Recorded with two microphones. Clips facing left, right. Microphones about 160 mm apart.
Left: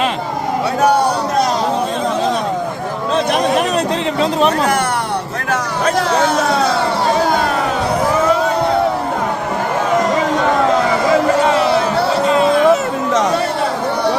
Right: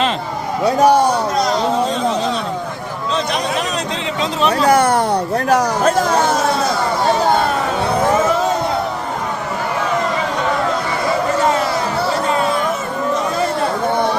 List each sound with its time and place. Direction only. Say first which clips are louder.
4.2 s speech: left 1 dB; 50° left (ahead or behind)
12.6 s vehicle: left 6 dB; 80° left